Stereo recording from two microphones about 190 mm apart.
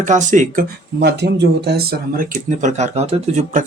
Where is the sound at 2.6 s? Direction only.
40° right (ahead or behind).